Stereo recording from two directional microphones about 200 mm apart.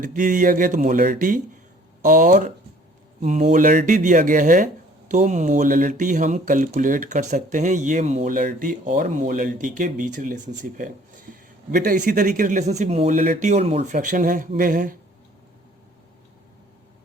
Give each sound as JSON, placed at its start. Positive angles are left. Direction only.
{"t": 0.0, "sound": "speech", "side_deg": -40}